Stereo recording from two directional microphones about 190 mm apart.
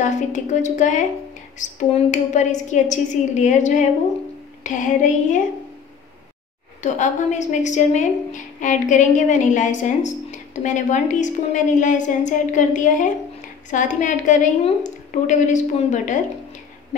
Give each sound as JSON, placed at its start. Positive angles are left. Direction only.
{"t": 0.0, "sound": "a woman's voice", "side_deg": 40}
{"t": 6.8, "sound": "a woman's voice", "side_deg": 40}